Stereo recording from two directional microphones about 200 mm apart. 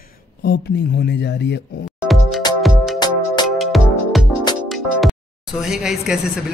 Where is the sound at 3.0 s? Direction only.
20° left (ahead or behind).